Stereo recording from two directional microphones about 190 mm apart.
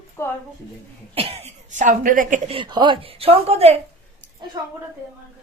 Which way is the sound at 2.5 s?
25° right (ahead or behind).